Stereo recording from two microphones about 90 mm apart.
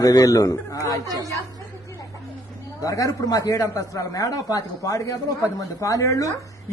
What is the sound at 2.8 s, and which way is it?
Speech, 40° left (ahead or behind).